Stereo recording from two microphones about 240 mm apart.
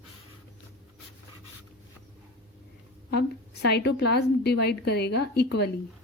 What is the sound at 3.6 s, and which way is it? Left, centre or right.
A woman's voice, left.